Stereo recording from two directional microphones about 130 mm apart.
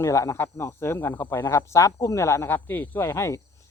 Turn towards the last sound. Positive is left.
turn(degrees=20)  # may be behind; listen again after turning